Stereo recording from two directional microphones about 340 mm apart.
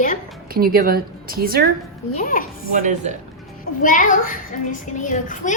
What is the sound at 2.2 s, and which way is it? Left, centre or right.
Speech, left.